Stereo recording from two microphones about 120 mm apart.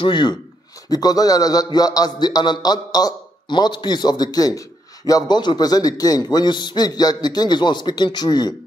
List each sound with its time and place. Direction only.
0.0 s a man's voice: 40° left (ahead or behind)